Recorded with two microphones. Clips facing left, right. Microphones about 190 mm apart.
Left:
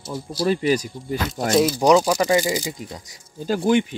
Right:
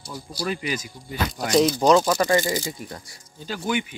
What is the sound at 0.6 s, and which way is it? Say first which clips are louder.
Speech: left 9 dB; 40° left (ahead or behind).